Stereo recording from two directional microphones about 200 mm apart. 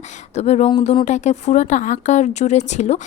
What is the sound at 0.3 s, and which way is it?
Speech, 35° left (ahead or behind).